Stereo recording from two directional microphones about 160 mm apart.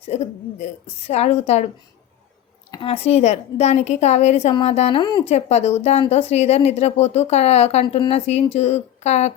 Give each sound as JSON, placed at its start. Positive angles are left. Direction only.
{"t": 0.0, "sound": "a woman's voice", "side_deg": 45}
{"t": 2.8, "sound": "a woman's voice", "side_deg": 35}
{"t": 5.3, "sound": "a woman's voice", "side_deg": 45}